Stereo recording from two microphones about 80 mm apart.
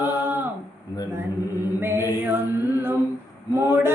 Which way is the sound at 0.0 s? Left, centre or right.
Right.